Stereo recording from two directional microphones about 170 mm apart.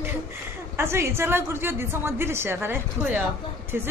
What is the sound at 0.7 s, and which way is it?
Speech, 15° right (ahead or behind).